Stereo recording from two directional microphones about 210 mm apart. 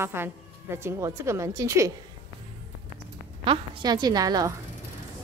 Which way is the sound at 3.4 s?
20° right (ahead or behind).